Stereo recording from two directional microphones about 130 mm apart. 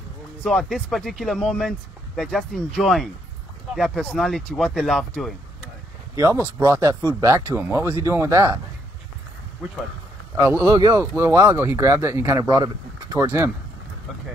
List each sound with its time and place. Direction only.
0.4 s speech: 5° left (ahead or behind)
6.1 s speech: 20° right (ahead or behind)
10.3 s speech: 20° right (ahead or behind)